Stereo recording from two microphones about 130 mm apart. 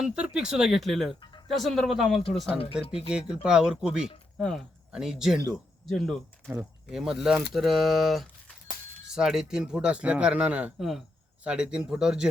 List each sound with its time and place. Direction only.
0.0 s speech: 5° right (ahead or behind)
2.5 s speech: 45° left (ahead or behind)
3.1 s a man's voice: 5° right (ahead or behind)